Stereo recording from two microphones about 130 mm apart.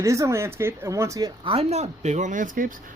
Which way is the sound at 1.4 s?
45° right (ahead or behind).